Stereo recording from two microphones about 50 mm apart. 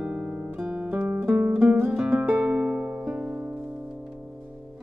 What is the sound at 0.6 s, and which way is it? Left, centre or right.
Guitar, right.